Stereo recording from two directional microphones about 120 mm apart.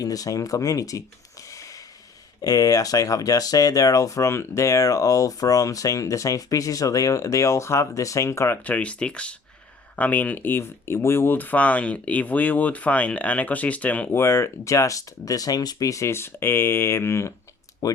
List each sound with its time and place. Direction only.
0.0 s speech: 30° left (ahead or behind)
8.6 s speech: 10° left (ahead or behind); by 18.0 s 30° left (ahead or behind)